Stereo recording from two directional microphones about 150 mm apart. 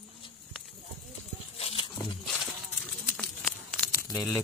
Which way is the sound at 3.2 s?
5° left (ahead or behind).